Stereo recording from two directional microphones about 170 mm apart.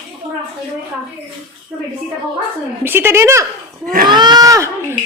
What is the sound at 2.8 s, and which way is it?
Speech, 15° right (ahead or behind).